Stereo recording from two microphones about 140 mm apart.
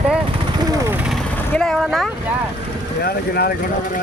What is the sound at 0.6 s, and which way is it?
Vehicle, 25° right (ahead or behind).